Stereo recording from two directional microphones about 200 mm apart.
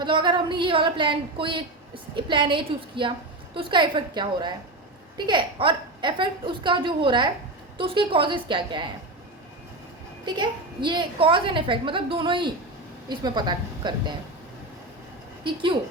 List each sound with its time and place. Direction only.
0.0 s a woman's voice: 25° right (ahead or behind)
10.2 s a woman's voice: 25° right (ahead or behind)
15.4 s a woman's voice: 25° right (ahead or behind)